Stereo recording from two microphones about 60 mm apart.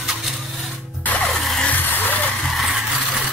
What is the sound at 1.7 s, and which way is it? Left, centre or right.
Vehicle, left.